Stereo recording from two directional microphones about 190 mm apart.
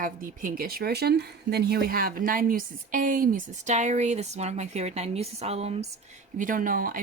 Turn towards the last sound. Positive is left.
turn(degrees=-45)  # may be behind; listen again after turning